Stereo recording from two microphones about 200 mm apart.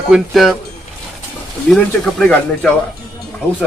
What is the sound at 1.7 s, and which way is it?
Speech, 5° left (ahead or behind).